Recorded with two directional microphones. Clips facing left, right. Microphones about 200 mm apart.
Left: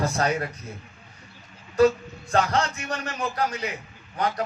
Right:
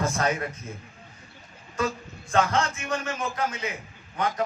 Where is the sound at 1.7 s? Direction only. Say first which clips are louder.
Left 10 dB; 35° left (ahead or behind).